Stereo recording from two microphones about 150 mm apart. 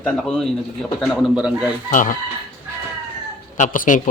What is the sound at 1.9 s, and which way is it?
Speech, 60° left (ahead or behind).